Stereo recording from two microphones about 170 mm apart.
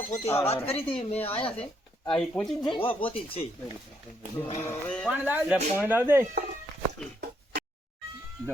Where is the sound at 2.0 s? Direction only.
5° left (ahead or behind).